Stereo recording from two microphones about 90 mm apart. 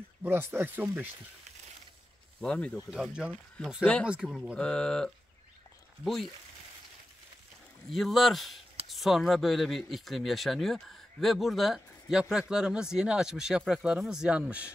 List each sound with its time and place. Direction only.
0.2 s speech: 25° right (ahead or behind)
2.4 s speech: 10° left (ahead or behind)
2.9 s speech: 5° right (ahead or behind)
3.8 s speech: 15° left (ahead or behind)
4.1 s speech: 10° right (ahead or behind)
4.6 s speech: 10° left (ahead or behind)
7.9 s speech: centre (ahead or behind)